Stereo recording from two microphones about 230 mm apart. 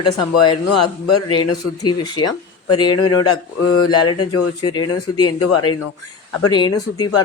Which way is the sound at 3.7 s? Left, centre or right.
Left.